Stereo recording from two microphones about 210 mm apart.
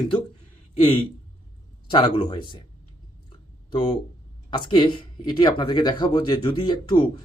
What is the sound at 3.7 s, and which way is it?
Speech, 20° left (ahead or behind).